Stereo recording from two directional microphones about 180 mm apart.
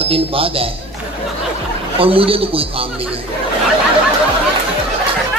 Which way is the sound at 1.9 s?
30° right (ahead or behind).